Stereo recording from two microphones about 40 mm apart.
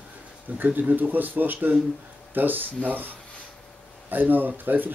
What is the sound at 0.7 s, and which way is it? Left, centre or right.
Speech, right.